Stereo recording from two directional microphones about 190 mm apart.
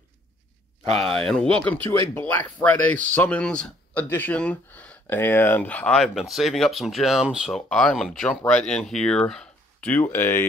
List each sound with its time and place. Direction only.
0.8 s speech: 30° right (ahead or behind)
1.1 s speech: 5° left (ahead or behind)